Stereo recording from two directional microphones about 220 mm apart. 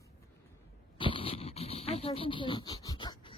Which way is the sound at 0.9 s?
25° left (ahead or behind).